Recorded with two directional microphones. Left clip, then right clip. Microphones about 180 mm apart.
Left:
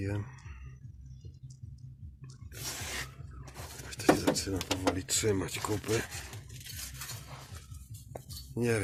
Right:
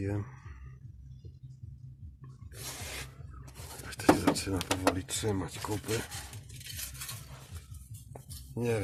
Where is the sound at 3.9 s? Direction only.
35° right (ahead or behind).